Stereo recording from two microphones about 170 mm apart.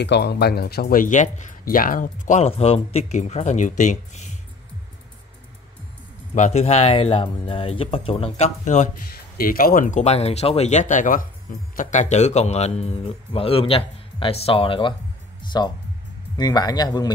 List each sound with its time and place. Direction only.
0.0 s speech: 85° left; by 4.4 s 45° left (ahead or behind)
6.3 s a man's voice: 40° left (ahead or behind)
9.1 s a man's voice: 60° left (ahead or behind); by 15.0 s 30° left (ahead or behind)
15.4 s music: 25° left (ahead or behind)
16.3 s speech: 25° left (ahead or behind)